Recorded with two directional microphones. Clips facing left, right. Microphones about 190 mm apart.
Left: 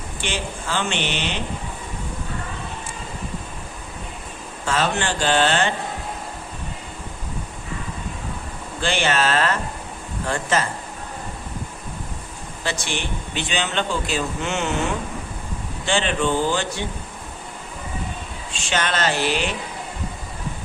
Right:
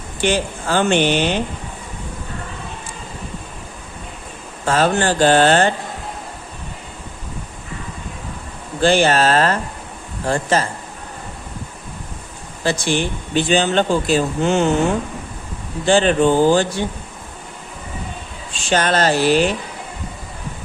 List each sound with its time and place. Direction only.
0.2 s speech: 45° right (ahead or behind)
4.6 s speech: 40° right (ahead or behind)
8.8 s speech: 40° right (ahead or behind)
12.6 s speech: 35° right (ahead or behind)
15.9 s speech: 40° right (ahead or behind)
18.7 s speech: 40° right (ahead or behind)